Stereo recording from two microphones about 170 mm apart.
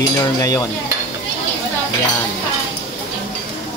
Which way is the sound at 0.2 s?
20° left (ahead or behind).